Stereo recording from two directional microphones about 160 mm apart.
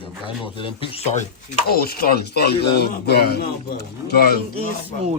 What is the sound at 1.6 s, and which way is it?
A man's voice, 75° left (ahead or behind).